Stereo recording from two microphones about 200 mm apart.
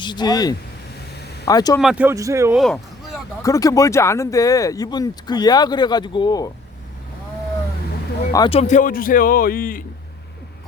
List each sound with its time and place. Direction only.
0.0 s speech: 20° left (ahead or behind)
1.8 s a man's voice: 5° right (ahead or behind)
2.6 s a sound: centre (ahead or behind)
3.4 s speech: 15° left (ahead or behind)
8.3 s speech: 20° left (ahead or behind)
8.5 s a man's voice: 35° left (ahead or behind)